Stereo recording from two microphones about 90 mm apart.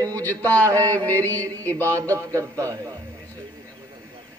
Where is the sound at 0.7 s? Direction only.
40° right (ahead or behind).